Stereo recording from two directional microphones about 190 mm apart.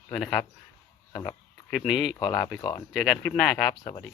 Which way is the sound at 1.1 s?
15° left (ahead or behind).